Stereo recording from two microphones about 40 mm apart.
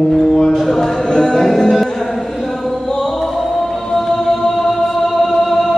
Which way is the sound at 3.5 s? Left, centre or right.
Centre.